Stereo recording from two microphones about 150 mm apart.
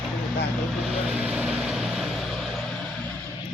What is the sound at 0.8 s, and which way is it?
Vehicle, 5° right (ahead or behind).